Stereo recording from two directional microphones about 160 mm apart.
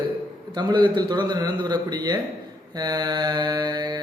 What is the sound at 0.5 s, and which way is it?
Mantra, 30° right (ahead or behind).